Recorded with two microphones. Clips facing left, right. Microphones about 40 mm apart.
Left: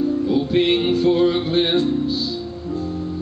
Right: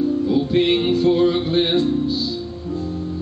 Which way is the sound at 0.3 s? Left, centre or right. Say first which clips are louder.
Even; centre.